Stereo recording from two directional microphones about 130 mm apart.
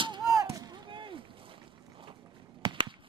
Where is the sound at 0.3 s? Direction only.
25° right (ahead or behind); by 1.2 s 40° right (ahead or behind).